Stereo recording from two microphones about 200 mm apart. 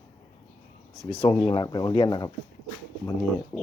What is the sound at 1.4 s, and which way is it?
Speech, 25° left (ahead or behind).